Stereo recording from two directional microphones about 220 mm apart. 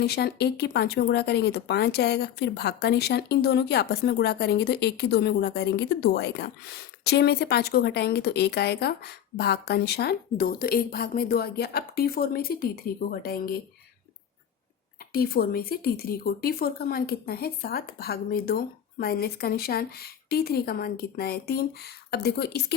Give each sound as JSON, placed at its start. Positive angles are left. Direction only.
{"t": 0.0, "sound": "speech", "side_deg": 45}
{"t": 15.1, "sound": "speech", "side_deg": 45}